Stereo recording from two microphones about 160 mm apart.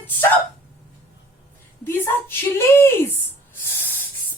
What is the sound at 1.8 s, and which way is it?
A woman's voice, 15° left (ahead or behind).